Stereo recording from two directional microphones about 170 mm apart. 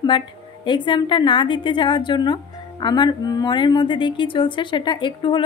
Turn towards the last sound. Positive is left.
turn(degrees=30)  # may be behind; listen again after turning